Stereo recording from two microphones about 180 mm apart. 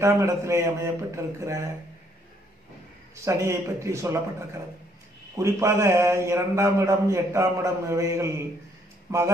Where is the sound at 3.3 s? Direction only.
15° right (ahead or behind).